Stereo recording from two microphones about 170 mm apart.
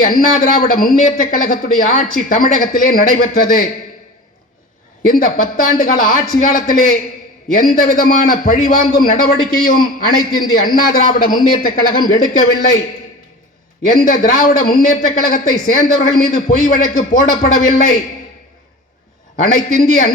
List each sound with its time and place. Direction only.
0.0 s speech: 55° left (ahead or behind)
5.0 s a man's voice: 55° left (ahead or behind)
13.8 s speech: 55° left (ahead or behind)
19.4 s speech: 50° left (ahead or behind)